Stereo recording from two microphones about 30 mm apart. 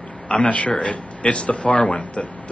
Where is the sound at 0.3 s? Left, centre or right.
Left.